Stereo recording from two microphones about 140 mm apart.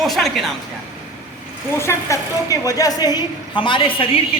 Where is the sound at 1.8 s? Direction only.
20° left (ahead or behind); by 4.2 s 40° left (ahead or behind).